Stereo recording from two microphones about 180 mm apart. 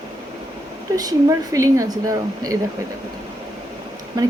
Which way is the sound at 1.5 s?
20° right (ahead or behind).